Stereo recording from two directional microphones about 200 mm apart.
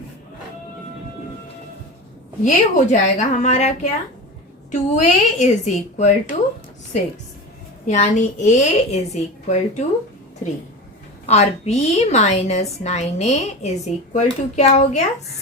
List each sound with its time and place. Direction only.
2.4 s a woman's voice: 40° left (ahead or behind)
7.9 s a woman's voice: 35° left (ahead or behind)
11.3 s a woman's voice: 35° left (ahead or behind)